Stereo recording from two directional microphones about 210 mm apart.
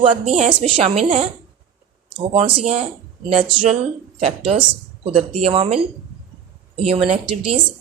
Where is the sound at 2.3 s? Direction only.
25° right (ahead or behind).